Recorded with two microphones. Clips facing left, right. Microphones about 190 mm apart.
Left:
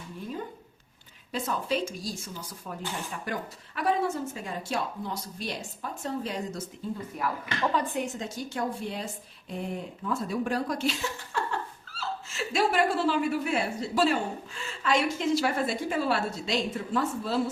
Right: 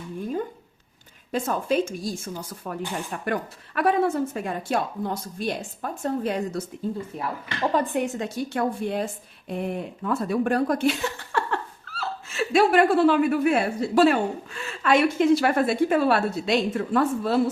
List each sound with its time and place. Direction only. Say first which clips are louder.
1.3 s speech: right 5 dB; 50° right (ahead or behind)
7.7 s speech: right 9 dB; 55° right (ahead or behind)